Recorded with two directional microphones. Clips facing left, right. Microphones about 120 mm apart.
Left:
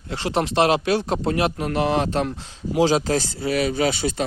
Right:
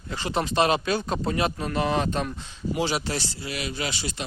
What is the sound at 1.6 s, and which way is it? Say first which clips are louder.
Speech: left 4 dB; 90° left.